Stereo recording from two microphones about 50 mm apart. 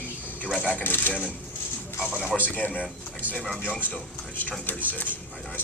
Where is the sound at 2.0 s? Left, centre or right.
Centre.